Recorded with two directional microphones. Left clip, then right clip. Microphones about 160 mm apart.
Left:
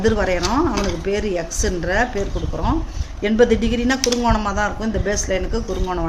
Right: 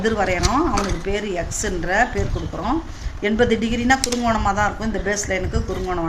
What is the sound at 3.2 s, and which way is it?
A woman's voice, 45° left (ahead or behind).